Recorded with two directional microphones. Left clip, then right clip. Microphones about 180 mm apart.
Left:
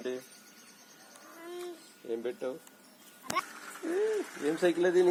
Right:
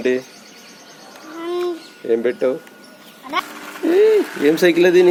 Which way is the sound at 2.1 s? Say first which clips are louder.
Right 18 dB; 15° right (ahead or behind).